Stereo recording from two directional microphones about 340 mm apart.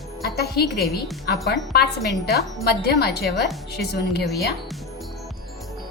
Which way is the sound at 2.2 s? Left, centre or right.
Left.